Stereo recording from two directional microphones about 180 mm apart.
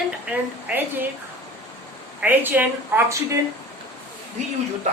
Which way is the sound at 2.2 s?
10° right (ahead or behind).